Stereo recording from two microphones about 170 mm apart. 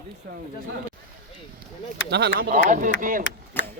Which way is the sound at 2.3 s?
55° right (ahead or behind).